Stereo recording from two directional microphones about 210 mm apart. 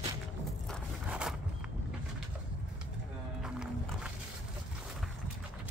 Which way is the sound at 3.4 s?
5° right (ahead or behind).